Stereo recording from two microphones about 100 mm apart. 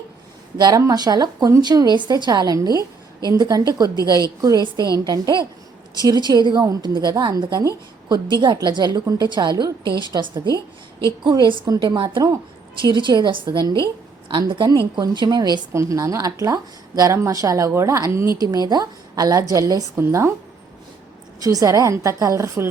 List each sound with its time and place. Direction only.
0.6 s a woman's voice: 35° right (ahead or behind)
15.7 s a woman's voice: 30° right (ahead or behind)
18.4 s a woman's voice: 40° right (ahead or behind)
20.0 s speech: 25° right (ahead or behind)
21.4 s a woman's voice: 35° right (ahead or behind)